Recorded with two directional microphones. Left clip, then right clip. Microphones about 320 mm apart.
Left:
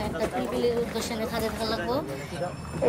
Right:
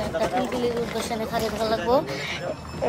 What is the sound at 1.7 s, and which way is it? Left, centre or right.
Speech, centre.